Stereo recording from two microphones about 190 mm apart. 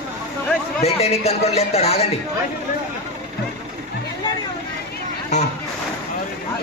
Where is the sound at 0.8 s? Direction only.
35° left (ahead or behind).